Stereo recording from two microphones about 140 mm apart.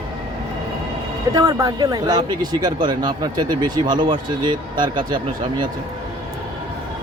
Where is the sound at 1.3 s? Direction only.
25° right (ahead or behind).